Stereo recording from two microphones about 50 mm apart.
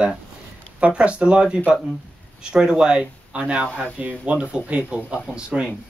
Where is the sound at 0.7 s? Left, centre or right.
Right.